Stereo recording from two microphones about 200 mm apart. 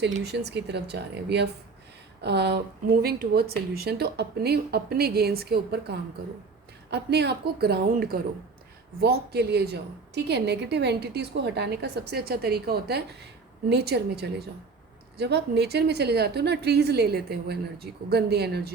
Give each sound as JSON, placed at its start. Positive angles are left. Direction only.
{"t": 0.2, "sound": "a woman's voice", "side_deg": -55}